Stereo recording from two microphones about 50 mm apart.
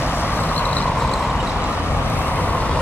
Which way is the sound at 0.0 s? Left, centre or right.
Left.